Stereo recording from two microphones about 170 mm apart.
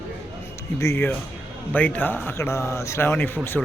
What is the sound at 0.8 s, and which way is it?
A man's voice, 15° left (ahead or behind).